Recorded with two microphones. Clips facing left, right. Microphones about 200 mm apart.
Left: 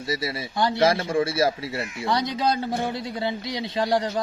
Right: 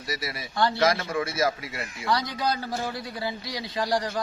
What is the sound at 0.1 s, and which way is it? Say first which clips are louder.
A man's voice: left 5 dB; 25° left (ahead or behind).